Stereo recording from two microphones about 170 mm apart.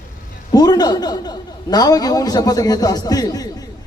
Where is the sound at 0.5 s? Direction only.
25° left (ahead or behind).